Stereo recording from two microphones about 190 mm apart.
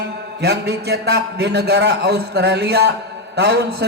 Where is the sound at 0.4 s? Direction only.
55° right (ahead or behind).